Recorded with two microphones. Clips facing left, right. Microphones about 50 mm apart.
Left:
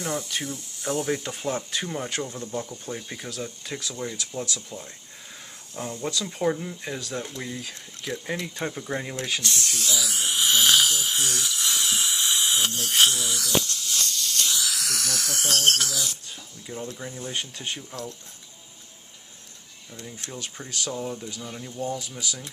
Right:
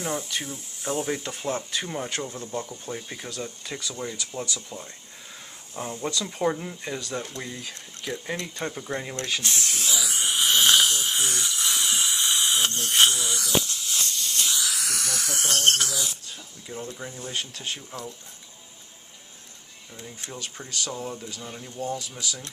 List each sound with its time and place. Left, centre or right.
0.0 s speech: centre
9.4 s speech: right
9.9 s owl: centre
14.1 s a sound: centre
14.4 s a sound: centre
16.6 s speech: centre
20.4 s speech: centre